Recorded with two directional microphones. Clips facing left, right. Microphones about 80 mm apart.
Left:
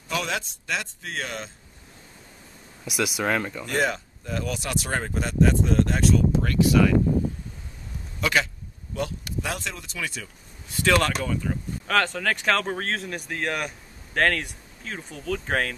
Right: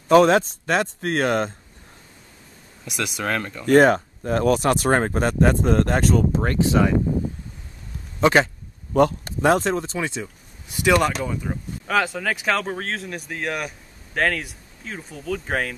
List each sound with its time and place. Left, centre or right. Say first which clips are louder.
0.1 s speech: right 14 dB; right
2.8 s speech: left 1 dB; centre
3.6 s speech: right 16 dB; right
8.2 s a man's voice: right 7 dB; right
9.2 s speech: right 12 dB; right; by 15.7 s centre